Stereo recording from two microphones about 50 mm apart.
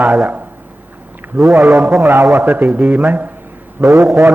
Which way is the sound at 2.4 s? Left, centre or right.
Right.